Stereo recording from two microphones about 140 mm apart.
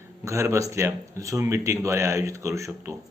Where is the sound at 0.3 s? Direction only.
20° right (ahead or behind).